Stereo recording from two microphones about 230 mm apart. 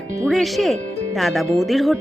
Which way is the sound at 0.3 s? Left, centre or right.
Centre.